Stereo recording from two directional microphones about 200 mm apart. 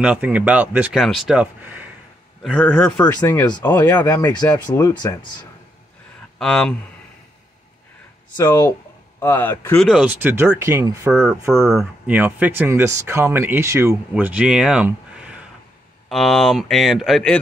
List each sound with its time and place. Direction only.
0.0 s speech: 5° right (ahead or behind)
2.6 s speech: 10° left (ahead or behind)
6.3 s speech: 5° left (ahead or behind)
8.4 s speech: 20° left (ahead or behind)
9.8 s speech: 5° right (ahead or behind)